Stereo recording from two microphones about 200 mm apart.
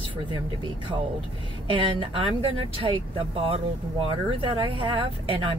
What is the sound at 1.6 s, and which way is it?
Speech, 25° right (ahead or behind).